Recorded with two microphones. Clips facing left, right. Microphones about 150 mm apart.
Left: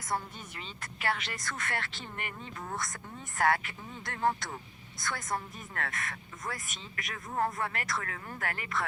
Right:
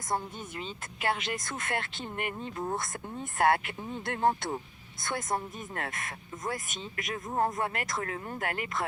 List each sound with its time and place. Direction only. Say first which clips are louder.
1.0 s speech: right 3 dB; 20° right (ahead or behind)
3.5 s speech: right 3 dB; 55° right (ahead or behind)
4.1 s speech: right 3 dB; 25° right (ahead or behind)